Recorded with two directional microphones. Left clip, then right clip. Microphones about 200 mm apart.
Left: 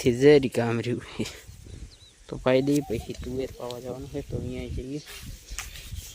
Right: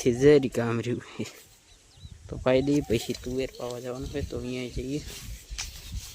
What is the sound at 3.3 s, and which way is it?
Speech, 5° right (ahead or behind).